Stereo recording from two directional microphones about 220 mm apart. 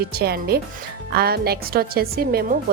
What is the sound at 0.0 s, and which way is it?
A woman's voice, 45° right (ahead or behind).